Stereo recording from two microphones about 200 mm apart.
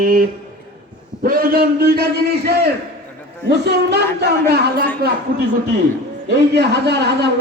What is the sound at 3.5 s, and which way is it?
Speech, 55° right (ahead or behind).